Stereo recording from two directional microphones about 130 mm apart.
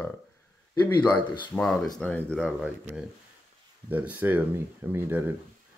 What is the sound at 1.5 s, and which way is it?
Speech, 5° left (ahead or behind).